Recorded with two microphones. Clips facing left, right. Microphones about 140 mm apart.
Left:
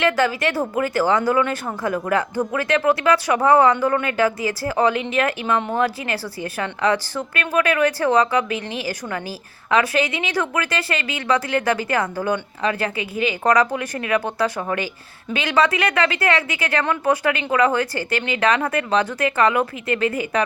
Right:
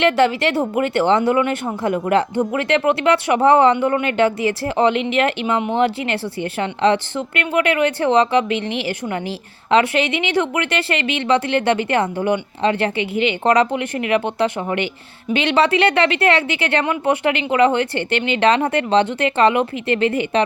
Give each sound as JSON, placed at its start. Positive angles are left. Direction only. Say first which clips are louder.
{"t": 0.0, "sound": "speech", "louder": "right 4 dB", "side_deg": -25}